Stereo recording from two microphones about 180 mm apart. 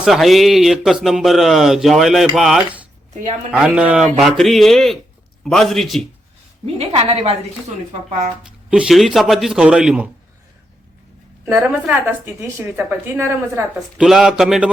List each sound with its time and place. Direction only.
0.0 s a man's voice: centre (ahead or behind)
6.7 s a woman's voice: 35° right (ahead or behind)
8.7 s a man's voice: centre (ahead or behind)
11.4 s a woman's voice: 10° right (ahead or behind)
14.0 s a man's voice: 5° right (ahead or behind)